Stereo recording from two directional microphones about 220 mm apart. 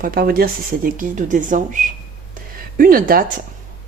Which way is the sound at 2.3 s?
40° right (ahead or behind).